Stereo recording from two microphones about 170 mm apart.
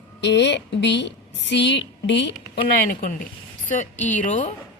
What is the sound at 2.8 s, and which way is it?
A woman's voice, 55° left (ahead or behind).